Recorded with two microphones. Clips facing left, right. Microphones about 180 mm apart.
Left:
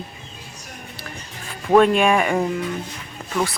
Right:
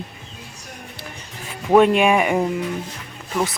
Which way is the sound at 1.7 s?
15° right (ahead or behind).